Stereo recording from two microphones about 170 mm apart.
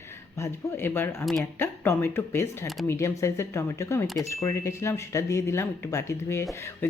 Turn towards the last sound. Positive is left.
turn(degrees=15)  # may be behind; listen again after turning